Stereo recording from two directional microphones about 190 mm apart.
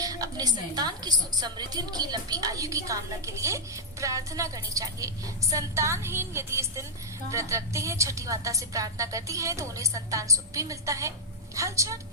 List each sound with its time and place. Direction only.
0.0 s a woman's voice: 20° right (ahead or behind)